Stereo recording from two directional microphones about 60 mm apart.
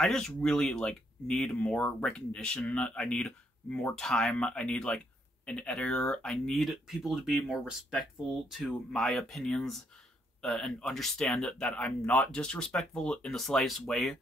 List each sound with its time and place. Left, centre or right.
0.0 s speech: centre
6.5 s speech: centre
8.5 s speech: centre
11.8 s speech: left; by 14.1 s centre